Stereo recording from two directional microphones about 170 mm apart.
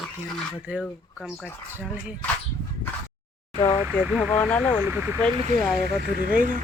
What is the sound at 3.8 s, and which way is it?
Speech, 5° right (ahead or behind).